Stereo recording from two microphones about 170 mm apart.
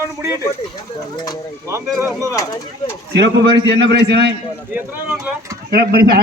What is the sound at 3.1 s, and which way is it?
A man's voice, 85° right.